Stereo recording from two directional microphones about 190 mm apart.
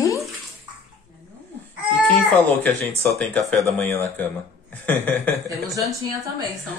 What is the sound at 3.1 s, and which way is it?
Speech, 5° left (ahead or behind).